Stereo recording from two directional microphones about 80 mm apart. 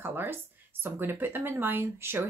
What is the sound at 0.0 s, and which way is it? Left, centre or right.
Speech, right.